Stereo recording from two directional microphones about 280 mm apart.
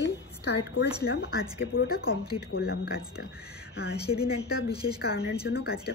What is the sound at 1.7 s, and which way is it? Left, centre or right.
Speech, left.